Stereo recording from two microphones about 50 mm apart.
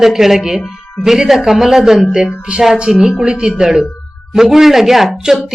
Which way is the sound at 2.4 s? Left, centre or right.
Centre.